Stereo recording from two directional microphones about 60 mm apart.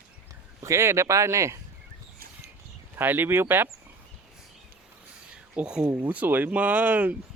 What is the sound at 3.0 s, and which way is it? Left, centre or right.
Speech, right.